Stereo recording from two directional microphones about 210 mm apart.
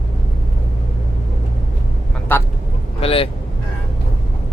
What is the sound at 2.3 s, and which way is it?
Speech, 10° left (ahead or behind).